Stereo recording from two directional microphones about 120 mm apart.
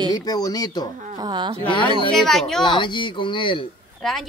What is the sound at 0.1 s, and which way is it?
Speech, 30° left (ahead or behind).